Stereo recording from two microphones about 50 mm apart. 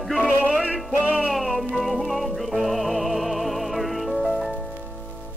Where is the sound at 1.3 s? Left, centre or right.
Centre.